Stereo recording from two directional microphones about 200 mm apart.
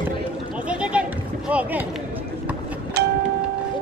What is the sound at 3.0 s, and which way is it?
Music, 55° right (ahead or behind).